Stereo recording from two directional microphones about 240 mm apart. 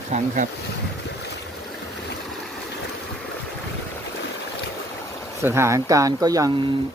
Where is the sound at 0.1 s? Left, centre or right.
Right.